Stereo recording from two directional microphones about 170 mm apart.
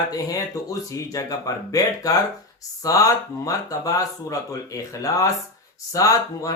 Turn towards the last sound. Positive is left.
turn(degrees=20)  # may be behind; listen again after turning